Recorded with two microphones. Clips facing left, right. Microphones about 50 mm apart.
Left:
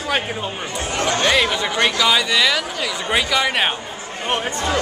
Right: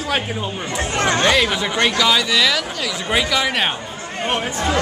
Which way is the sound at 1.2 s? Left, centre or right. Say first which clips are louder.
Left 1 dB; centre.